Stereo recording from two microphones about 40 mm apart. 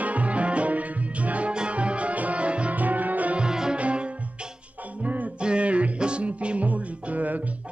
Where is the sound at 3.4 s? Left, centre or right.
Centre.